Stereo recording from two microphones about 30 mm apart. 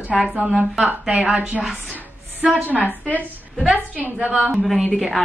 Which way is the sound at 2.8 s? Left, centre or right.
Left.